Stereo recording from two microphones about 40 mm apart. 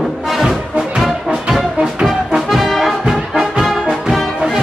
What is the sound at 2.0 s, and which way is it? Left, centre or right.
Brass instrument, centre.